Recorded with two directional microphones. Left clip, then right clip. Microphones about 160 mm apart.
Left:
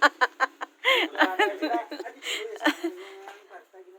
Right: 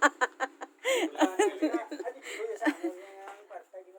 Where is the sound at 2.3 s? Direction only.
5° right (ahead or behind).